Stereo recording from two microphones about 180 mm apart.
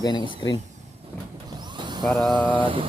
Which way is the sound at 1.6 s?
25° right (ahead or behind).